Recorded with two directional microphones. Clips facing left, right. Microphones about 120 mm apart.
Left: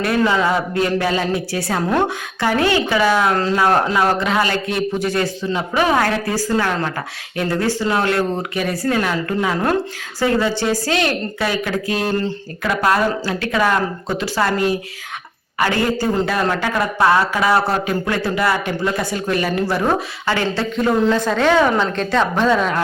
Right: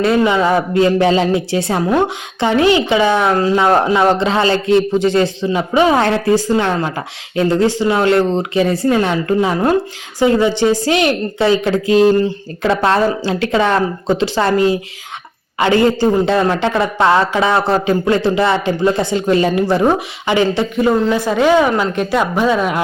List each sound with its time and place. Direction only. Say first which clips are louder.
0.3 s a woman's voice: right 5 dB; 20° right (ahead or behind)